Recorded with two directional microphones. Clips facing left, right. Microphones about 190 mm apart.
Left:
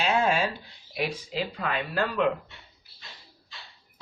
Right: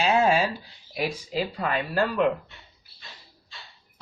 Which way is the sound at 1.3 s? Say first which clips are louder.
Right 3 dB; 40° right (ahead or behind).